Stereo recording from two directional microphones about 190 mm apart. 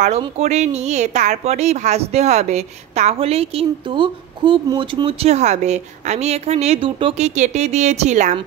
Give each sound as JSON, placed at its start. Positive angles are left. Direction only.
{"t": 0.2, "sound": "speech", "side_deg": -35}